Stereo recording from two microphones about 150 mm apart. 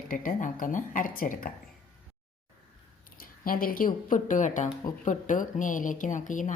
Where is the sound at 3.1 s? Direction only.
70° left (ahead or behind).